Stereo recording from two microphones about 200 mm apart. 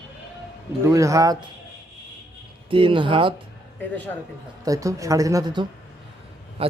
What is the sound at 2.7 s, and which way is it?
Speech, 25° right (ahead or behind).